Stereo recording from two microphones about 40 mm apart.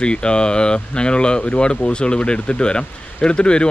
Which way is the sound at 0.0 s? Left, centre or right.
Left.